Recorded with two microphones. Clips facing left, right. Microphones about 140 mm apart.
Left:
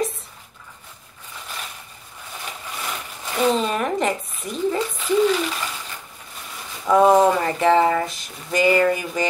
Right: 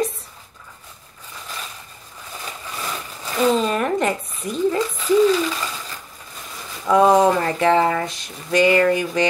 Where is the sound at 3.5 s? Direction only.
Centre (ahead or behind).